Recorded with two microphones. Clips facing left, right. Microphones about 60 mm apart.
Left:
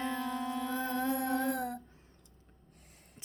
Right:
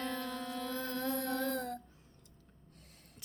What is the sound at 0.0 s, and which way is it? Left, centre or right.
Music, centre.